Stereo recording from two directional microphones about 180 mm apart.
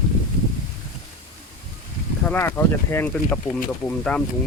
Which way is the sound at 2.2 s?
10° left (ahead or behind).